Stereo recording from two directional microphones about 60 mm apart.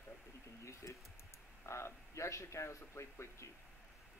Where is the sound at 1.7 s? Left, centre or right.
Left.